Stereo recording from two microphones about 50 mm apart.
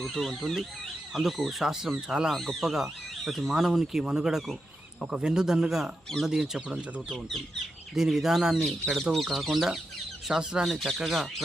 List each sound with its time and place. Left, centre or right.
0.0 s speech: centre
2.3 s speech: centre
8.5 s speech: centre
10.7 s speech: centre